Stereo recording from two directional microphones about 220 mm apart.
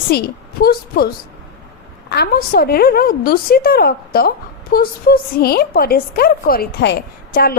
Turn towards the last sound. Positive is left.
turn(degrees=45)  # may be behind; listen again after turning